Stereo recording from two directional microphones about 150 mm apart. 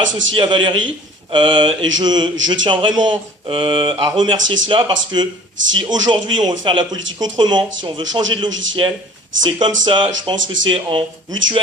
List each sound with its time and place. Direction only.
0.1 s speech: 30° right (ahead or behind)